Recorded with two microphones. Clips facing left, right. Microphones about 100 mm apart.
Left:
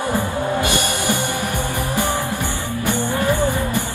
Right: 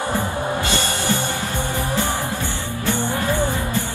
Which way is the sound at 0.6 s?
15° left (ahead or behind).